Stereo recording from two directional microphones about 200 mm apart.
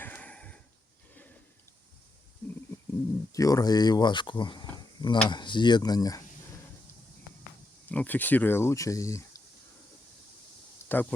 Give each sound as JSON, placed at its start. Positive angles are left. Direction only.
{"t": 0.0, "sound": "a sound", "side_deg": 10}
{"t": 3.3, "sound": "speech", "side_deg": 15}
{"t": 7.9, "sound": "speech", "side_deg": 10}
{"t": 10.8, "sound": "speech", "side_deg": 10}